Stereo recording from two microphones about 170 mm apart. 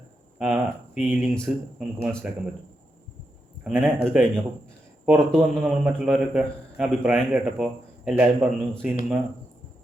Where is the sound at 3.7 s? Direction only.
10° right (ahead or behind).